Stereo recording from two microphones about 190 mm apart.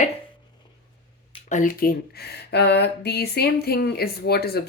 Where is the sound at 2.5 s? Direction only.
60° left (ahead or behind).